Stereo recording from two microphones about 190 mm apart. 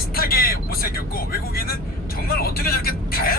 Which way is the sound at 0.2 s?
50° left (ahead or behind).